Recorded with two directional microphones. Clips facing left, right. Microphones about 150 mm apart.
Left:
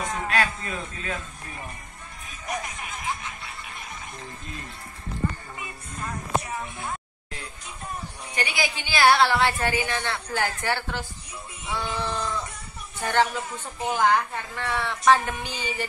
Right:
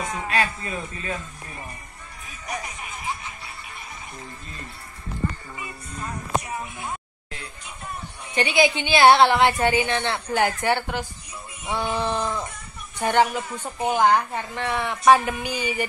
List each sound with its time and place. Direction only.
0.0 s a sound: 5° right (ahead or behind)
0.4 s a man's voice: 5° right (ahead or behind)
2.4 s snicker: centre (ahead or behind)
8.4 s a woman's voice: 20° right (ahead or behind)
11.6 s a sound: 20° right (ahead or behind)
12.0 s goat: 20° right (ahead or behind)
13.0 s a woman's voice: 15° right (ahead or behind)